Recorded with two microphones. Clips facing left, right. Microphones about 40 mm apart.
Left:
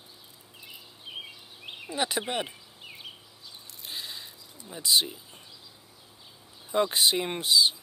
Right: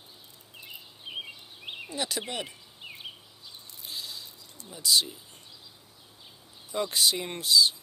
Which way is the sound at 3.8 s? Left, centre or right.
Left.